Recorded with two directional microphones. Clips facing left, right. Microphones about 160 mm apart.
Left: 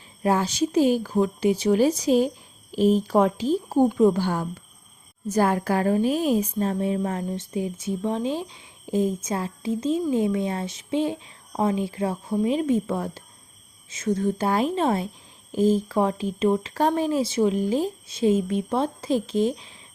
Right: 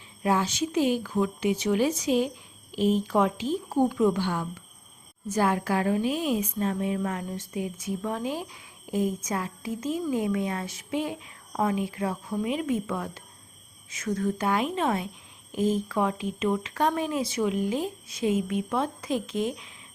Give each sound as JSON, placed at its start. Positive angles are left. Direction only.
{"t": 0.2, "sound": "a woman's voice", "side_deg": 40}